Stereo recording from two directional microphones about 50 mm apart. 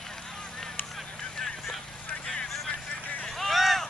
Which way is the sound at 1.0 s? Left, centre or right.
Centre.